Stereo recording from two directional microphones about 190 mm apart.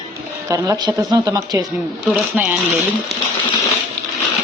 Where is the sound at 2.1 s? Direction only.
5° right (ahead or behind).